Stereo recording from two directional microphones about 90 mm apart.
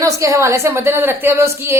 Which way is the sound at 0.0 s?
35° right (ahead or behind).